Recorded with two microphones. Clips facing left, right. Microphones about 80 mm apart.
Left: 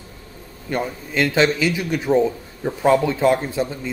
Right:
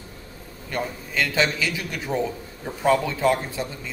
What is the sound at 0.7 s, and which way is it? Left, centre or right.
A man's voice, left.